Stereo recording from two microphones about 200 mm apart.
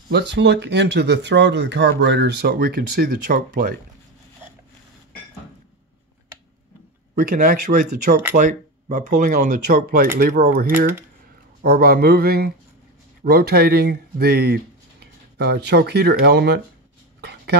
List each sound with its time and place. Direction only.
0.1 s speech: 60° right (ahead or behind)
7.2 s speech: 40° right (ahead or behind)
17.2 s a sound: 55° right (ahead or behind)